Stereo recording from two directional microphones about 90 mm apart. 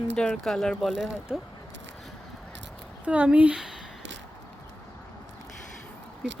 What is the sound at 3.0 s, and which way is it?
Speech, 15° right (ahead or behind).